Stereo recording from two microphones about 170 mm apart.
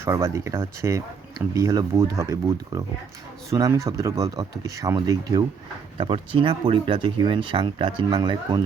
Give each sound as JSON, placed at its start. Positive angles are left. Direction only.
{"t": 0.0, "sound": "speech", "side_deg": -15}